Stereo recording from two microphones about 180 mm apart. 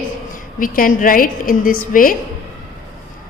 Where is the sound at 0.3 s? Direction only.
50° left (ahead or behind).